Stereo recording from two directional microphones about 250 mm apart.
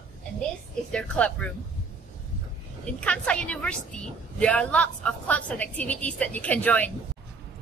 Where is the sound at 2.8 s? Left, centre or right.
Centre.